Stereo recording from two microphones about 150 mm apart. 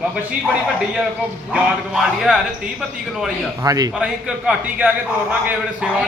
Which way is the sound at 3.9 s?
5° right (ahead or behind).